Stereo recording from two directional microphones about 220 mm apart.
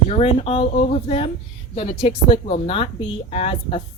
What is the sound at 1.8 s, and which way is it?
Speech, 25° left (ahead or behind).